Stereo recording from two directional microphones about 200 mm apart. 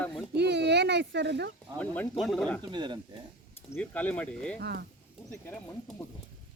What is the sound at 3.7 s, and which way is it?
Speech, 10° left (ahead or behind).